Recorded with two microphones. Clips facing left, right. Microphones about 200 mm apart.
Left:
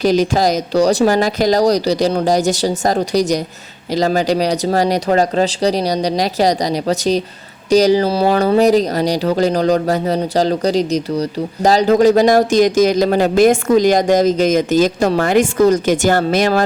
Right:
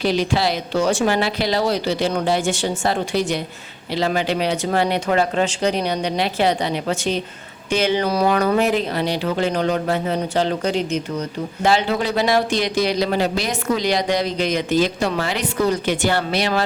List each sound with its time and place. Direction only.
0.0 s speech: 45° left (ahead or behind)